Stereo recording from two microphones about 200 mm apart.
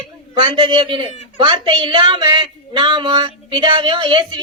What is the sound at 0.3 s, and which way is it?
Speech, 25° right (ahead or behind).